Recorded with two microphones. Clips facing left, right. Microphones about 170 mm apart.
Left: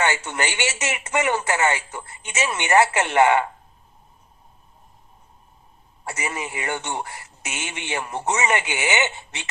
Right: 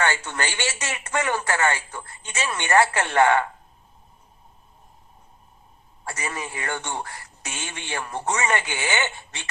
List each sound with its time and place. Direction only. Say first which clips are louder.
0.0 s speech: left 2 dB; 20° left (ahead or behind)
6.1 s speech: left 2 dB; 20° left (ahead or behind)